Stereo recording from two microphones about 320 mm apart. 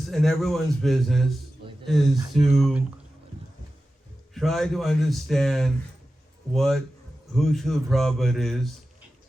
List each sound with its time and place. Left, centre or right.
0.1 s speech: centre
4.4 s speech: centre